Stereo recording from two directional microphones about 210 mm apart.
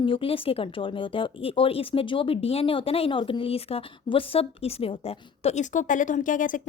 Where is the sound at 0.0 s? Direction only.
25° left (ahead or behind).